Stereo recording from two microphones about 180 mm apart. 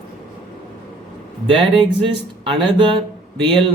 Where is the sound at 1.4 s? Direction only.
30° right (ahead or behind).